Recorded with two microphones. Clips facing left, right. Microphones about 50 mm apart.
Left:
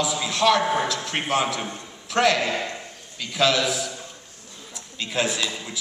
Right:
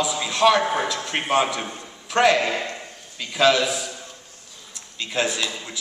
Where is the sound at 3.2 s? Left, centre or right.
Centre.